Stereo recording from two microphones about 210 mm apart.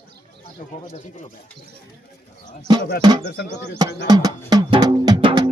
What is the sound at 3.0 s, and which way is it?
Speech, 20° right (ahead or behind).